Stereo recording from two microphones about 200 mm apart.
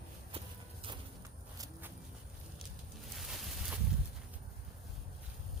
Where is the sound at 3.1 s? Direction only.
Centre (ahead or behind).